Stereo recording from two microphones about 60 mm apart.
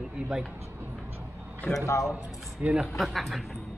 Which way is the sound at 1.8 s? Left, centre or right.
Left.